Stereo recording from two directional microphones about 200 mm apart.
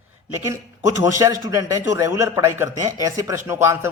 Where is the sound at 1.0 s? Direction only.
15° right (ahead or behind).